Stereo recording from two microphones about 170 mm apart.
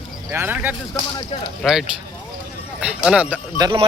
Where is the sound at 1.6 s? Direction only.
Centre (ahead or behind).